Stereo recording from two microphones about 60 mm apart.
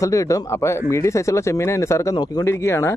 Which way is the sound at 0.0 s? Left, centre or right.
Left.